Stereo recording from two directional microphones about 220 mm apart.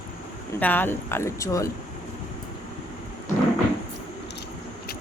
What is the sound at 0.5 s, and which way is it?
Speech, 10° left (ahead or behind).